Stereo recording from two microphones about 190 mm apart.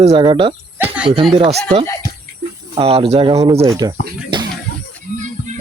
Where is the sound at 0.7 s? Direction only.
10° right (ahead or behind).